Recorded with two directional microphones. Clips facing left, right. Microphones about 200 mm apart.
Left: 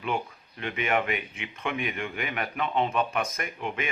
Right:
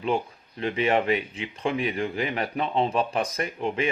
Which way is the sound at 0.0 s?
30° right (ahead or behind).